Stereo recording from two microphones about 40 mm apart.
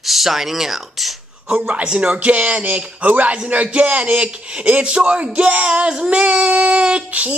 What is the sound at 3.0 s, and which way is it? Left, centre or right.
Speech, right.